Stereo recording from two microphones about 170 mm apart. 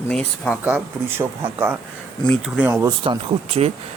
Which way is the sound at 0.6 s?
10° right (ahead or behind).